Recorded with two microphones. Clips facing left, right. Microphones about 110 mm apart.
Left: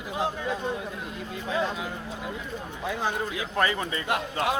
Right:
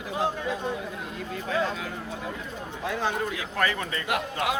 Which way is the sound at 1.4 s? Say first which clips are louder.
Even; 20° left (ahead or behind).